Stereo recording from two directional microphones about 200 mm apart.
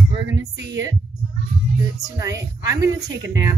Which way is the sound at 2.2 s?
15° right (ahead or behind).